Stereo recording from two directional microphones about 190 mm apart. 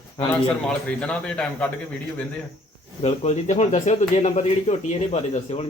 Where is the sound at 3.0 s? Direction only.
35° left (ahead or behind).